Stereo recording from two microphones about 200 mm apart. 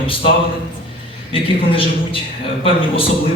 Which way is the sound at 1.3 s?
25° left (ahead or behind).